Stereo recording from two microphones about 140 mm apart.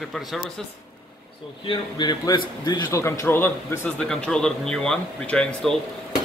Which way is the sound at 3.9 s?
5° left (ahead or behind).